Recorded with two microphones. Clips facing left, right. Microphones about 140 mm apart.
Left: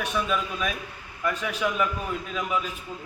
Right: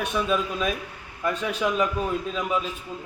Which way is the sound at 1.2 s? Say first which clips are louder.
Right 2 dB; 25° right (ahead or behind).